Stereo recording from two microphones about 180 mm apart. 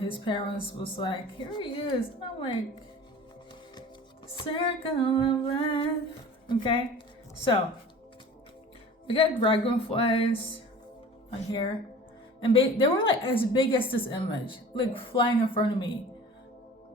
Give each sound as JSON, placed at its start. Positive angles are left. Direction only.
{"t": 0.1, "sound": "a woman's voice", "side_deg": 30}
{"t": 4.4, "sound": "a woman's voice", "side_deg": 30}
{"t": 9.0, "sound": "speech", "side_deg": 30}
{"t": 12.4, "sound": "a woman's voice", "side_deg": 30}